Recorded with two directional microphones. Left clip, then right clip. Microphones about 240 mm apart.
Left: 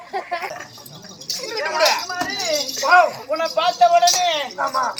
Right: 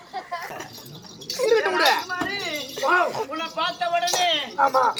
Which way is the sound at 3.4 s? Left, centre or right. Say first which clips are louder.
Left 13 dB; left.